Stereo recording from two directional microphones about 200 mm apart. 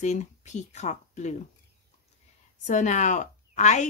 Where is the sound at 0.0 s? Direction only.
35° left (ahead or behind).